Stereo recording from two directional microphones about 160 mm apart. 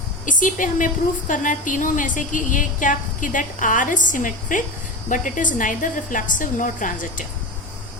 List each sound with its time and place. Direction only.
0.3 s a woman's voice: 55° left (ahead or behind)